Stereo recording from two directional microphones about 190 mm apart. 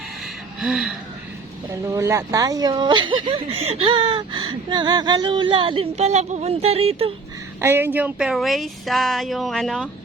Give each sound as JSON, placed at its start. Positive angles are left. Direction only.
{"t": 0.6, "sound": "speech", "side_deg": 0}
{"t": 1.9, "sound": "speech", "side_deg": -15}
{"t": 7.6, "sound": "speech", "side_deg": -10}